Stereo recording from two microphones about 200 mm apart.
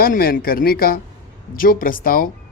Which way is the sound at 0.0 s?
45° left (ahead or behind).